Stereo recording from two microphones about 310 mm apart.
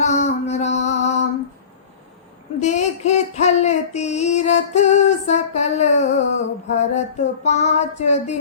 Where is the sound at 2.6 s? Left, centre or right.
Left.